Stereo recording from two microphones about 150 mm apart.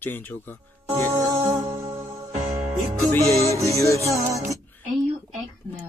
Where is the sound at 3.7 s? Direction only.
20° left (ahead or behind).